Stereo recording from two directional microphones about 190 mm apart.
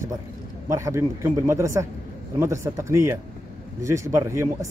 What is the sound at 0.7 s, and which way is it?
Speech, 15° right (ahead or behind).